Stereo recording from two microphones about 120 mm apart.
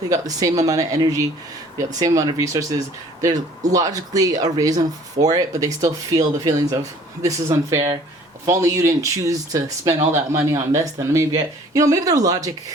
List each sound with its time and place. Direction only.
0.1 s speech: 30° right (ahead or behind)